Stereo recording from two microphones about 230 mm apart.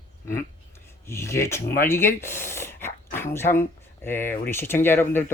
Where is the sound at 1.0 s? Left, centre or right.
Centre.